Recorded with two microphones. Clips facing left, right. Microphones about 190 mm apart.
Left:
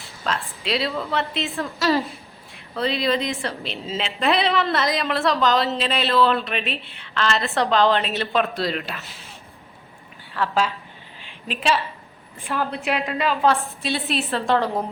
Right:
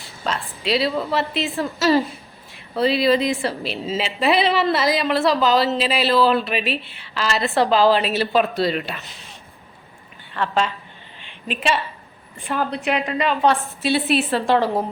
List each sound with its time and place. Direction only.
0.0 s a woman's voice: centre (ahead or behind)
10.3 s a woman's voice: 5° left (ahead or behind)
11.2 s a sound: centre (ahead or behind)
12.4 s a woman's voice: centre (ahead or behind)